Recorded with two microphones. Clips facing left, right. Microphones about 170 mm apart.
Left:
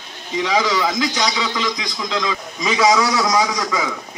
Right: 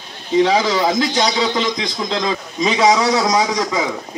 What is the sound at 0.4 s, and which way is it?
A man's voice, 30° right (ahead or behind).